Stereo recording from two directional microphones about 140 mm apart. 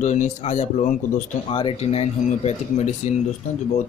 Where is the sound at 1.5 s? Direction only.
40° left (ahead or behind).